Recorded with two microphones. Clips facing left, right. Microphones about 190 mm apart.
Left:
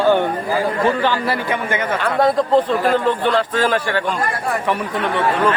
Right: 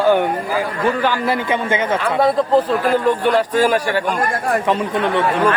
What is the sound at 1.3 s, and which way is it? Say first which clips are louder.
Speech: right 2 dB; 20° right (ahead or behind).